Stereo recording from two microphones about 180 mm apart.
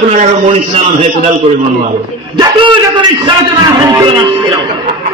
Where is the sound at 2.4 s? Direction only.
25° right (ahead or behind).